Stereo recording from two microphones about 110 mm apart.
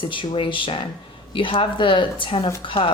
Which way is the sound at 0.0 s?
50° left (ahead or behind).